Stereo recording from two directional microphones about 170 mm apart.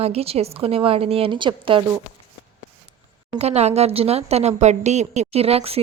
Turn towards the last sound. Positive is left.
turn(degrees=-35)  # may be behind; listen again after turning